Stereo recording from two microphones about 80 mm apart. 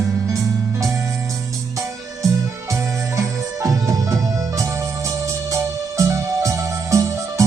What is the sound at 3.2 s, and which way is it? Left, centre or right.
Music, right.